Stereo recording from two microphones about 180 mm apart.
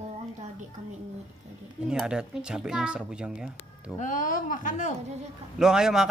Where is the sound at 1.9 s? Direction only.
5° right (ahead or behind).